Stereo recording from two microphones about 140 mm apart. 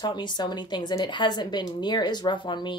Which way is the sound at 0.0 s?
30° left (ahead or behind).